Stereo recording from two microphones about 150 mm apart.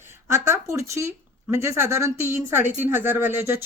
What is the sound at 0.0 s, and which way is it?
Speech, 15° right (ahead or behind).